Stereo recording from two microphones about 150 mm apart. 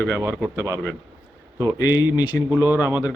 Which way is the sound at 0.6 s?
20° right (ahead or behind).